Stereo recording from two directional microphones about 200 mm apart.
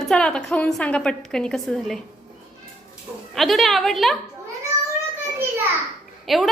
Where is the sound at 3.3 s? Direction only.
Centre (ahead or behind).